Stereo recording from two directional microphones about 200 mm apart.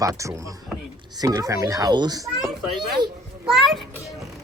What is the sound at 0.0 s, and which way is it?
Speech, 15° right (ahead or behind).